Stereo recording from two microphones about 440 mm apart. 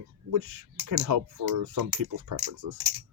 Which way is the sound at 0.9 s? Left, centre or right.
Right.